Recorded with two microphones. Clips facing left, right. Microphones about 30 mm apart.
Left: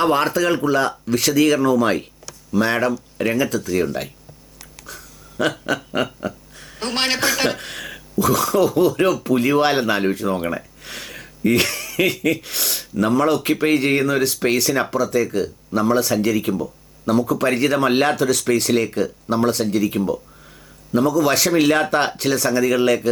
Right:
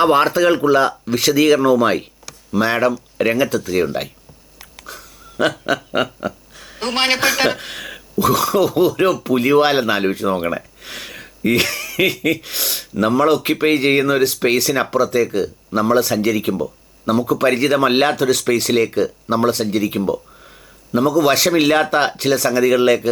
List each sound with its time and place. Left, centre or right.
0.0 s speech: right
4.8 s a sound: centre
7.2 s speech: right
7.6 s speech: centre
8.2 s speech: right
21.2 s speech: right